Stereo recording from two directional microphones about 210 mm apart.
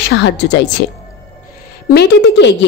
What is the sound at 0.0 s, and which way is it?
Speech, 55° left (ahead or behind).